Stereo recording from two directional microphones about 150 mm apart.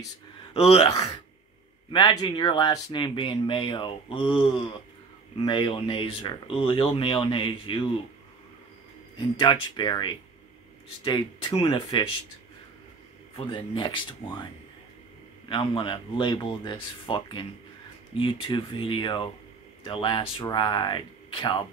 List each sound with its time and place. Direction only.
0.5 s speech: 40° left (ahead or behind)
9.4 s speech: 30° left (ahead or behind)
11.6 s speech: 35° left (ahead or behind)
13.3 s speech: 35° left (ahead or behind)